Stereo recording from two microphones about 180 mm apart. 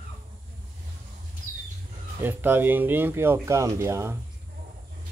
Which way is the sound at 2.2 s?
10° right (ahead or behind).